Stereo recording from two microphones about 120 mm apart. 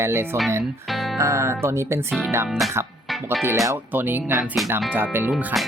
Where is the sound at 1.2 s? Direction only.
25° right (ahead or behind).